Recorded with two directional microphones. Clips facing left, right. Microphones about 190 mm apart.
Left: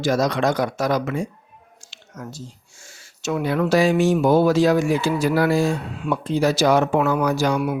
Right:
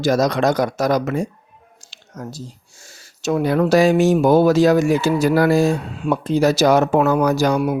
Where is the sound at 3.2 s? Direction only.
40° right (ahead or behind).